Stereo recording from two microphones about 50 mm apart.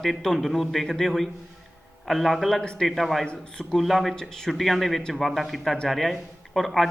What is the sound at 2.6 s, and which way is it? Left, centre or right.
Speech, centre.